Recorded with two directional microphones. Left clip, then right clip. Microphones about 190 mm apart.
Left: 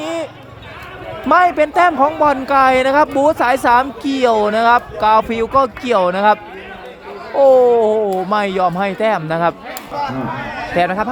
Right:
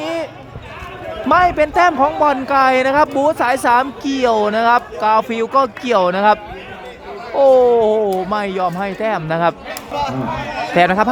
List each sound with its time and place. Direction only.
0.0 s run: centre (ahead or behind)
1.3 s speech: centre (ahead or behind)
9.9 s a sound: 50° right (ahead or behind)
10.8 s speech: 10° right (ahead or behind)